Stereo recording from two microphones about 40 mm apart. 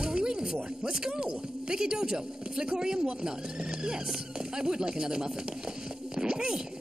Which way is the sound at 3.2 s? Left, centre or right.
Centre.